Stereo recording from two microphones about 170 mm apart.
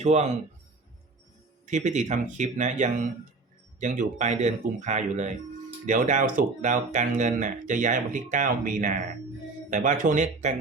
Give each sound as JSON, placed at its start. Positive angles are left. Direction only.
{"t": 0.0, "sound": "a man's voice", "side_deg": -40}
{"t": 1.6, "sound": "speech", "side_deg": -45}